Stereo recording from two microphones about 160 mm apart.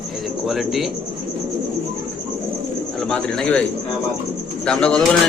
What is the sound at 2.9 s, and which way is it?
Speech, 5° left (ahead or behind).